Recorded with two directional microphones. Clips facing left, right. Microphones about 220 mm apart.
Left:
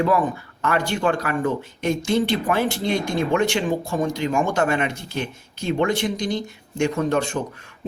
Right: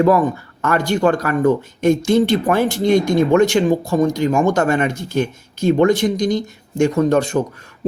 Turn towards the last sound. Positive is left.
turn(degrees=-40)  # may be behind; listen again after turning